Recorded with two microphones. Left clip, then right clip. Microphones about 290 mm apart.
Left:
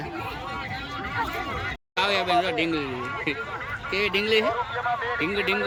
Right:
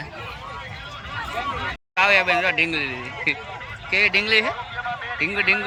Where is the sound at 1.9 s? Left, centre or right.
Centre.